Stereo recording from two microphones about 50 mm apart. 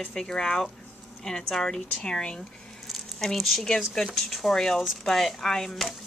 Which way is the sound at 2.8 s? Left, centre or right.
Centre.